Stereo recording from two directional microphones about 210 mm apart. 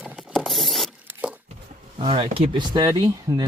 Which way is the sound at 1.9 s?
25° right (ahead or behind).